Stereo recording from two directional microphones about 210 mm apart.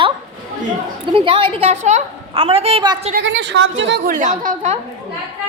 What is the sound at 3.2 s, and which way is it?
Speech, 60° right (ahead or behind).